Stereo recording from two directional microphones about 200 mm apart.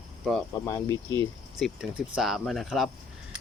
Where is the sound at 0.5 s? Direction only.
15° left (ahead or behind).